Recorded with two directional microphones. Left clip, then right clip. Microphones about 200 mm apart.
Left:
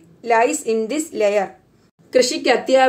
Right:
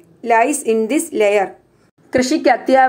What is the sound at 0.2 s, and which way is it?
A woman's voice, 10° right (ahead or behind).